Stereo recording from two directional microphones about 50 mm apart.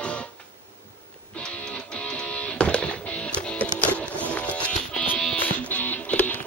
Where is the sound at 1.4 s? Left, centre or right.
Centre.